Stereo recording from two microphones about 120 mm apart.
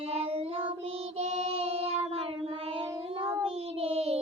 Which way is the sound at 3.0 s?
50° right (ahead or behind).